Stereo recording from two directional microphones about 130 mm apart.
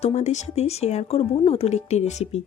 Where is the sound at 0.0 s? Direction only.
55° left (ahead or behind).